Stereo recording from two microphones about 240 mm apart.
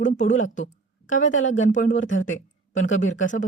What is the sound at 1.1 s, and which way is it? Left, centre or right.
Speech, left.